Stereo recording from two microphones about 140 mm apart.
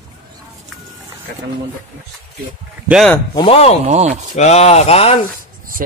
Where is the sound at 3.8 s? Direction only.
55° right (ahead or behind).